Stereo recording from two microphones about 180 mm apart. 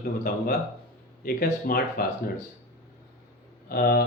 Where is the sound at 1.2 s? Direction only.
55° left (ahead or behind).